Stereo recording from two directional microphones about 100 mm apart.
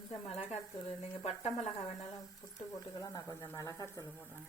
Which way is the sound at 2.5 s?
40° left (ahead or behind).